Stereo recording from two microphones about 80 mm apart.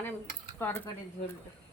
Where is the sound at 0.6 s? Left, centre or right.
Left.